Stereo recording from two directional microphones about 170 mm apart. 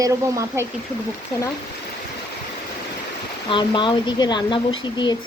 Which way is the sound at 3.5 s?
25° left (ahead or behind).